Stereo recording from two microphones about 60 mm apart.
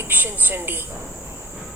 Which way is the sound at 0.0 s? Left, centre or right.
Right.